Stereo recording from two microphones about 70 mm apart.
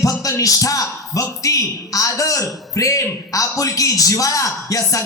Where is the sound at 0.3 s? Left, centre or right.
Left.